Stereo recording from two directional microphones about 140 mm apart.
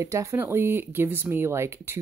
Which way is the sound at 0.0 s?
20° right (ahead or behind).